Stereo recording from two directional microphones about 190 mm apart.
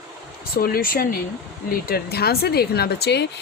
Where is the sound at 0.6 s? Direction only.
50° left (ahead or behind).